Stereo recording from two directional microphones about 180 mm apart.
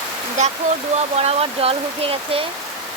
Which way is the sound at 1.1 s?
35° right (ahead or behind).